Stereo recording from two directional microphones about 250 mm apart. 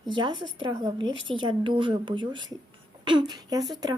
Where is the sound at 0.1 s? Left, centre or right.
Centre.